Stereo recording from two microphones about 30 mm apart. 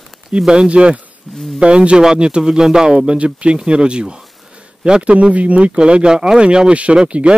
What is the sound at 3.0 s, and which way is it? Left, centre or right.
Speech, right.